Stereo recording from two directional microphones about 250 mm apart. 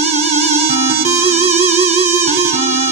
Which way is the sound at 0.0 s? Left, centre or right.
Right.